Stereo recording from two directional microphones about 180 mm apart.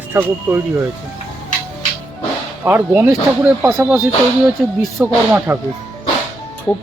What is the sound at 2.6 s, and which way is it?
Speech, 10° right (ahead or behind).